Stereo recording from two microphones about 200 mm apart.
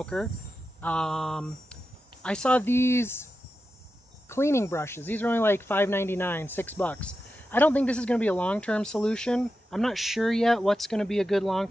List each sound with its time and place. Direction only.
0.0 s speech: 5° left (ahead or behind)
4.3 s speech: 15° left (ahead or behind)